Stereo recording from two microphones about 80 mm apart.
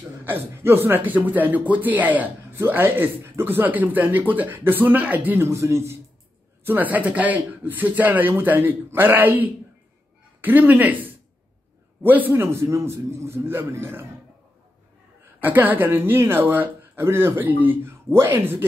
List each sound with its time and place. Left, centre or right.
0.2 s a man's voice: right
5.5 s a man's voice: right
6.6 s a man's voice: right
15.4 s a man's voice: right